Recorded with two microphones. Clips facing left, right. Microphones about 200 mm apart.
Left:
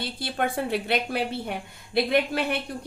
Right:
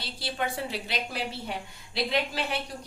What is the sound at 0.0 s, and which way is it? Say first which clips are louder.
A woman's voice: left 4 dB; 55° left (ahead or behind).